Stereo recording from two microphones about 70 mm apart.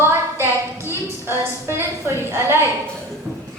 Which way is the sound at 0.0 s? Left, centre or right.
Right.